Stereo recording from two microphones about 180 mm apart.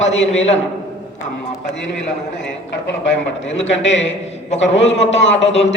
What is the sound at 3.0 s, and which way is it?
A man's voice, 90° left.